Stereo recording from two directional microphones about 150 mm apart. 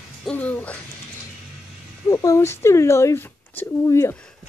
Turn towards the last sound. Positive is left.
turn(degrees=15)  # may be behind; listen again after turning